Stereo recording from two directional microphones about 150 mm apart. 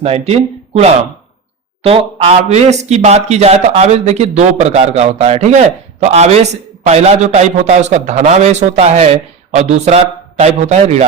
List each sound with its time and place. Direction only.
0.0 s a man's voice: 45° right (ahead or behind)